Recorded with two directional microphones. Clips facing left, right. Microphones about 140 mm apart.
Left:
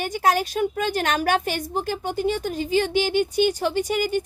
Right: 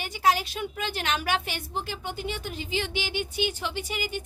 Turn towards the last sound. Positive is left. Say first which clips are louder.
# left 10 dB
turn(degrees=45)  # may be behind; listen again after turning